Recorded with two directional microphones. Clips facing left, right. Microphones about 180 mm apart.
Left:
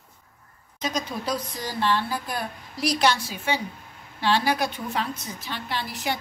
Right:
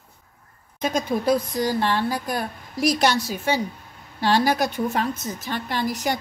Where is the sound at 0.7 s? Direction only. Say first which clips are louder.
Right 6 dB; 55° right (ahead or behind).